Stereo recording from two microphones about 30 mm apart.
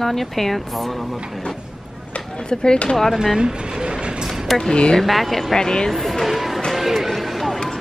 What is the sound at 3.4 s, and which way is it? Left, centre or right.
Vehicle, right.